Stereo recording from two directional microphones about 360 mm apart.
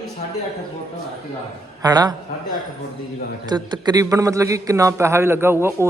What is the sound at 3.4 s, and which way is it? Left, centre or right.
A man's voice, centre.